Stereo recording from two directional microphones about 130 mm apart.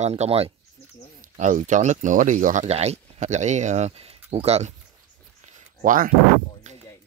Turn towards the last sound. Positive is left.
turn(degrees=-70)  # may be behind; listen again after turning